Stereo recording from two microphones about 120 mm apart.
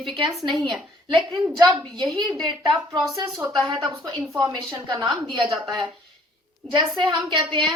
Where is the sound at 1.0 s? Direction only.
40° right (ahead or behind).